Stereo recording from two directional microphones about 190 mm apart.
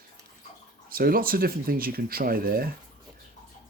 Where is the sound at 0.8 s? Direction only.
50° right (ahead or behind).